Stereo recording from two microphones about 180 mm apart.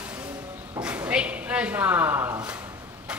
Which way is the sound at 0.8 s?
5° right (ahead or behind).